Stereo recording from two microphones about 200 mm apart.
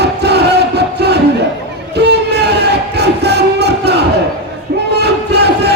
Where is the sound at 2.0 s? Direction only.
55° right (ahead or behind).